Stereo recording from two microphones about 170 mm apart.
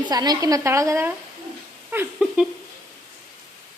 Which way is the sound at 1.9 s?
10° right (ahead or behind).